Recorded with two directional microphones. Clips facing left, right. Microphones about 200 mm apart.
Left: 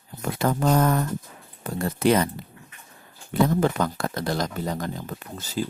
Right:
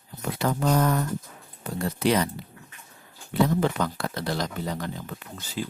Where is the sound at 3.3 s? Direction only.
50° left (ahead or behind).